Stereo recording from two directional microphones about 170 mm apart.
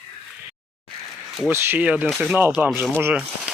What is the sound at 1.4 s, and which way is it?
Speech, 10° right (ahead or behind).